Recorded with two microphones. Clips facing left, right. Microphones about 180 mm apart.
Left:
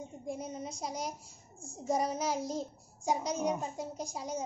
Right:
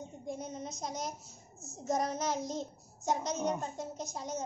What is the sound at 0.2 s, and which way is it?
A woman's voice, 10° left (ahead or behind).